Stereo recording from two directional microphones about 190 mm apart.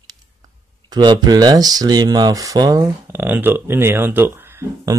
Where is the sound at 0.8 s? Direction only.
20° right (ahead or behind).